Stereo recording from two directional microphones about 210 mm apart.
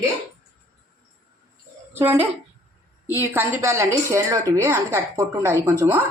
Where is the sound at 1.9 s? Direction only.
10° right (ahead or behind).